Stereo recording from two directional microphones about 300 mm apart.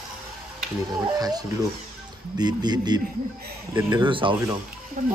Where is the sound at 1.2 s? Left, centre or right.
Centre.